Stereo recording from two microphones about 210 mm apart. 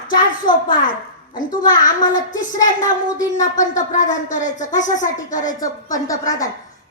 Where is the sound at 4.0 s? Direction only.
35° left (ahead or behind).